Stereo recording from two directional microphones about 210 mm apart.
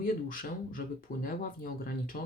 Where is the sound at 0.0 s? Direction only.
40° left (ahead or behind).